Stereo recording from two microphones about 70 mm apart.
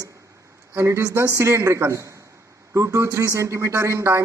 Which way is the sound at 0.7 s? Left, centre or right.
Right.